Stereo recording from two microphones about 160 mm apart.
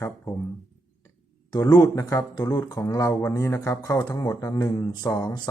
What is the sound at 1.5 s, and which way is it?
Speech, 25° left (ahead or behind).